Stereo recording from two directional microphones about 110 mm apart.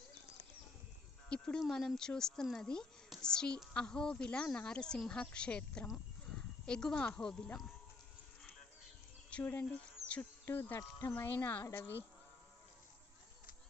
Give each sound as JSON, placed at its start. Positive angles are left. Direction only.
{"t": 1.3, "sound": "speech", "side_deg": 10}
{"t": 9.3, "sound": "speech", "side_deg": 15}